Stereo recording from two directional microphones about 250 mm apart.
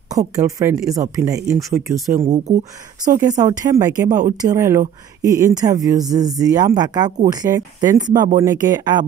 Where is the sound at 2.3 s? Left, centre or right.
Right.